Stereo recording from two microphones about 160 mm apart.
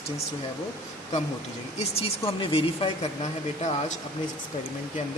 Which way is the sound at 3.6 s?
45° left (ahead or behind).